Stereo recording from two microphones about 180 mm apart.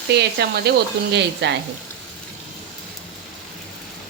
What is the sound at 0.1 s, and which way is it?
Speech, 65° right (ahead or behind).